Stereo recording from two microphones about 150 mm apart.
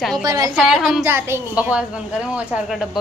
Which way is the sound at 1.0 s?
15° right (ahead or behind).